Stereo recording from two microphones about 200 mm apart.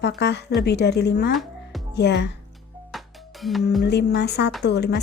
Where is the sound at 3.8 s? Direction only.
55° left (ahead or behind).